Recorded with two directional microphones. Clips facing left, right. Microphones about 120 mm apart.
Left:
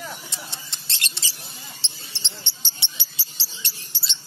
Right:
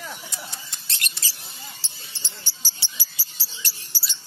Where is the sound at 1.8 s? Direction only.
25° left (ahead or behind).